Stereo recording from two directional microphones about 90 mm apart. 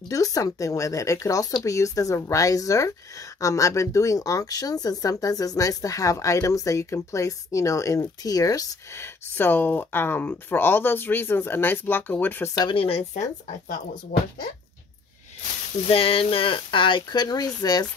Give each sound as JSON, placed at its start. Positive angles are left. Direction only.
{"t": 0.1, "sound": "speech", "side_deg": 40}
{"t": 12.6, "sound": "speech", "side_deg": 90}
{"t": 15.9, "sound": "speech", "side_deg": 90}